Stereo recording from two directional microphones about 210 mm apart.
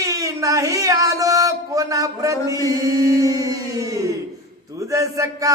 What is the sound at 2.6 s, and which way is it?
Chant, 15° right (ahead or behind).